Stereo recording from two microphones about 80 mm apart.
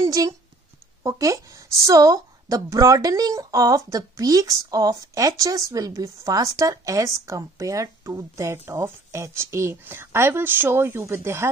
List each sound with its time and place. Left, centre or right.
0.0 s a woman's voice: right